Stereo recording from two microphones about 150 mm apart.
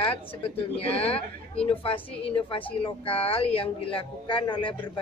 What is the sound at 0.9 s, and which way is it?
A woman's voice, 40° left (ahead or behind).